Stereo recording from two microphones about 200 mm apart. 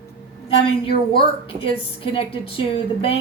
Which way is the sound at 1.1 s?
25° left (ahead or behind).